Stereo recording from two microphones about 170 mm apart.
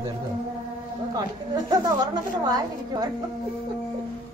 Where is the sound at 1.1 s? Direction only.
25° right (ahead or behind).